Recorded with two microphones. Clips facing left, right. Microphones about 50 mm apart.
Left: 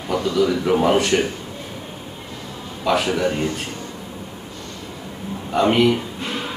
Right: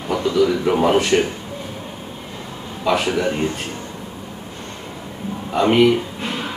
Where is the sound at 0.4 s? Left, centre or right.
Centre.